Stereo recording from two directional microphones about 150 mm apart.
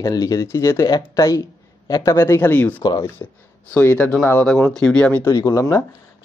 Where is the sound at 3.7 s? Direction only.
10° left (ahead or behind).